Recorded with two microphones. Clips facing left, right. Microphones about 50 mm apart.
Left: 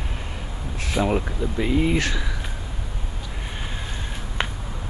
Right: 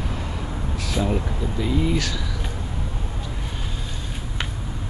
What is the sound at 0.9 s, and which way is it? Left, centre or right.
Speech, left.